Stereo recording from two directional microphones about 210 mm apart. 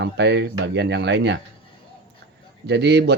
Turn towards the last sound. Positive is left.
turn(degrees=-55)  # may be behind; listen again after turning